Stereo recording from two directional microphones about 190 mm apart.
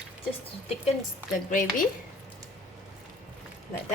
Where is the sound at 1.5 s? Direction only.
45° left (ahead or behind).